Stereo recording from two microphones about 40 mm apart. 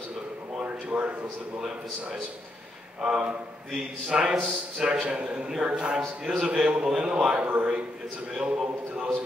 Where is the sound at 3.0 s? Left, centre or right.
Right.